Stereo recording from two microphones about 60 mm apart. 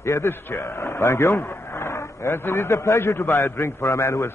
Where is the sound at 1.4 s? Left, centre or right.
Left.